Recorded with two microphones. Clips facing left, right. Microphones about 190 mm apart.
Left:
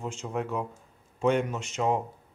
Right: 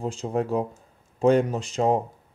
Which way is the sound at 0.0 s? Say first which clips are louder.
Right 6 dB; 35° right (ahead or behind).